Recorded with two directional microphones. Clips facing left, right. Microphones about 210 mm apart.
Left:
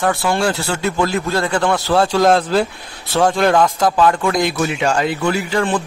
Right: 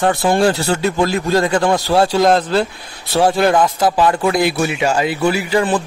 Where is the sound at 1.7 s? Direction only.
20° right (ahead or behind).